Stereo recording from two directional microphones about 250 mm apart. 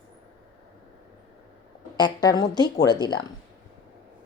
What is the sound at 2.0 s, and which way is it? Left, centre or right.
Speech, centre.